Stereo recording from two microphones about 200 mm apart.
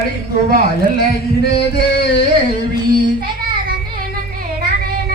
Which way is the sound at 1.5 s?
55° left (ahead or behind).